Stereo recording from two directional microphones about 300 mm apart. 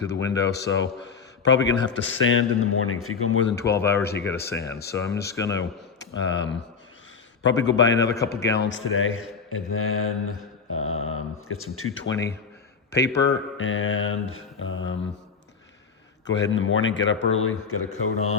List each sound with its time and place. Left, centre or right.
0.1 s a man's voice: left
3.8 s speech: centre
5.5 s a man's voice: left
16.2 s a man's voice: left